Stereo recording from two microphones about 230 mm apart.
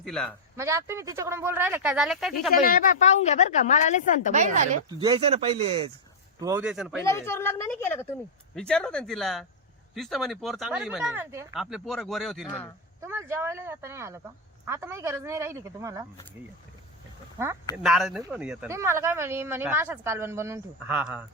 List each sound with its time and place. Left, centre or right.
0.0 s a woman's voice: centre
0.5 s speech: centre
2.6 s a woman's voice: left
4.3 s speech: right
4.9 s speech: centre
6.4 s a woman's voice: centre
7.0 s a woman's voice: centre
11.6 s a woman's voice: centre
13.0 s speech: centre
17.3 s speech: centre
17.8 s a woman's voice: centre